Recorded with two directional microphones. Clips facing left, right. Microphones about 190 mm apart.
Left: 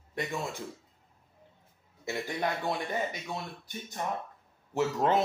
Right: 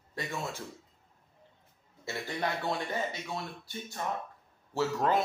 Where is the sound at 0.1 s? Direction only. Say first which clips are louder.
Left 2 dB; 20° left (ahead or behind).